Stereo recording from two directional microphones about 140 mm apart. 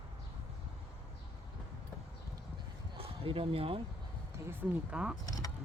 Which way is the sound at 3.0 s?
40° right (ahead or behind).